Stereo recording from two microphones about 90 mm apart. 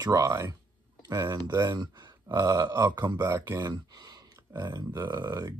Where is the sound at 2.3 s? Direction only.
40° right (ahead or behind).